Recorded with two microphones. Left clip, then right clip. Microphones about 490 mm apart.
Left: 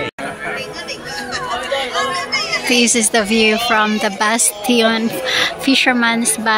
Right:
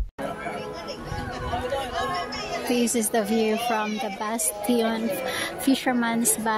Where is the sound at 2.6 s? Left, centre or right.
Right.